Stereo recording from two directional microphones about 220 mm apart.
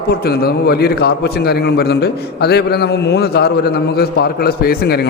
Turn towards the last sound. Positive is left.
turn(degrees=45)  # may be behind; listen again after turning